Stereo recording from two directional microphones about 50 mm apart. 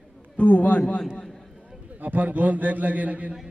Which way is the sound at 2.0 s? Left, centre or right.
Right.